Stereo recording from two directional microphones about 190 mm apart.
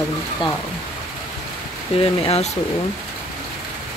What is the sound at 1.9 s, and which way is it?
Speech, 30° left (ahead or behind).